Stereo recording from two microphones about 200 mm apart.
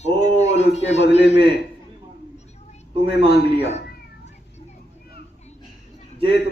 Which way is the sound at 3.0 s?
55° left (ahead or behind).